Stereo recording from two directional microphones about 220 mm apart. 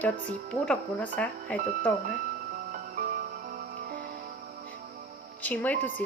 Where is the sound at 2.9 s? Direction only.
40° right (ahead or behind).